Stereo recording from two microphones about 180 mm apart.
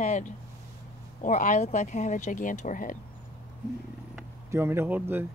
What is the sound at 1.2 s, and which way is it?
Speech, 45° left (ahead or behind).